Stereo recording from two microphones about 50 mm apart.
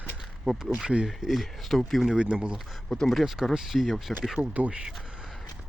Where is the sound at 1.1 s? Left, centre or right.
Centre.